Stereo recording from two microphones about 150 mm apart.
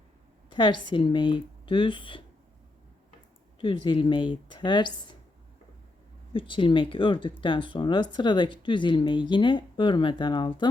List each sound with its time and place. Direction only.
0.5 s speech: 30° left (ahead or behind)
3.8 s speech: 35° left (ahead or behind)
6.3 s speech: 35° left (ahead or behind)